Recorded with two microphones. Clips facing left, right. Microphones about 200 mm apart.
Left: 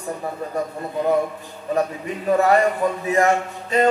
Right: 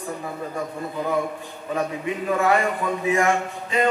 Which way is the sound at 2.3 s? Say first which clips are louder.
Left 4 dB; 40° left (ahead or behind).